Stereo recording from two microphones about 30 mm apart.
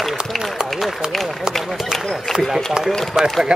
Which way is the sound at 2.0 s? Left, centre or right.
Centre.